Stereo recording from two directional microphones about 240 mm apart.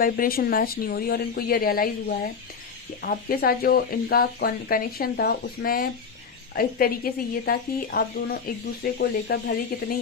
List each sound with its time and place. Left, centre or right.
0.0 s speech: left